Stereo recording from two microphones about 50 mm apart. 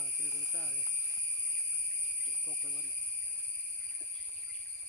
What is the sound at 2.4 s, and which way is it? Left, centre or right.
Speech, left.